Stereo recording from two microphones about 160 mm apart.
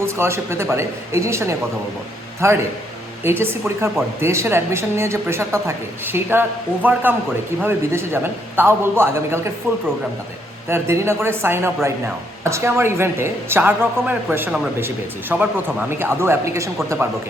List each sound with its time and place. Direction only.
0.0 s speech: 15° right (ahead or behind)